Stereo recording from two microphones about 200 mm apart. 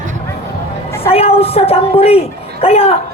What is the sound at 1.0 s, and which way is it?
Speech, 30° left (ahead or behind).